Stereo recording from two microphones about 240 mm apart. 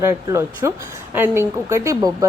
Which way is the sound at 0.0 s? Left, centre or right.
Centre.